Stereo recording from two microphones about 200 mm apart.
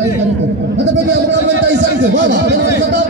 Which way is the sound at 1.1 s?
60° right (ahead or behind).